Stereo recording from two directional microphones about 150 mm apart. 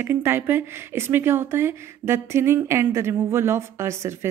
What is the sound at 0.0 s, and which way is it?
Speech, 15° right (ahead or behind).